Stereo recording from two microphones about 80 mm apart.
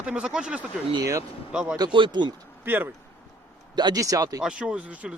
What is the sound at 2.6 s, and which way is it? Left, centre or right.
Speech, right.